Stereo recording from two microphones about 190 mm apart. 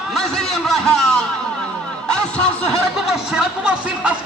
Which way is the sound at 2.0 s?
5° left (ahead or behind).